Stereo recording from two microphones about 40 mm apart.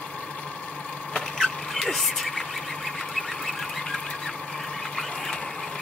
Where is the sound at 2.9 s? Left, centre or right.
Centre.